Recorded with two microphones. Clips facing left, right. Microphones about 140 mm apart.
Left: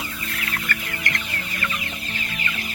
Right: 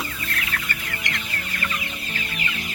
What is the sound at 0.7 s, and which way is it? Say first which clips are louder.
Chicken: left 3 dB; 20° right (ahead or behind).